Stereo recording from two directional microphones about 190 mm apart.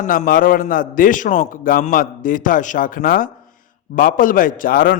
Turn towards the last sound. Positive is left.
turn(degrees=50)  # may be behind; listen again after turning